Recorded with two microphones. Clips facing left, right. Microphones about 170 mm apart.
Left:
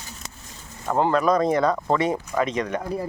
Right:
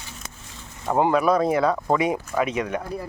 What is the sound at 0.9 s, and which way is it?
Speech, 10° right (ahead or behind).